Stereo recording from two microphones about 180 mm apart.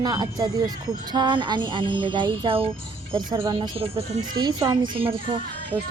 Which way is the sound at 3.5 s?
30° right (ahead or behind).